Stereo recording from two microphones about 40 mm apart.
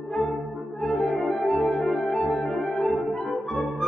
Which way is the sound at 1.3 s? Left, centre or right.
Centre.